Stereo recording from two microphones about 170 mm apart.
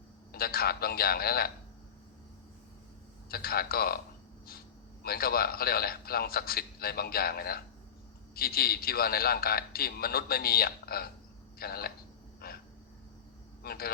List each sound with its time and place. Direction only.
0.3 s a man's voice: 65° left (ahead or behind)
3.2 s a man's voice: 65° left (ahead or behind)
5.0 s a man's voice: 65° left (ahead or behind)
12.4 s a sound: 65° left (ahead or behind)
13.6 s speech: 65° left (ahead or behind)